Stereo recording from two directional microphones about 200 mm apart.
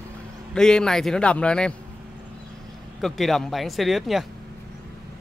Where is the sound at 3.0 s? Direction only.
Centre (ahead or behind).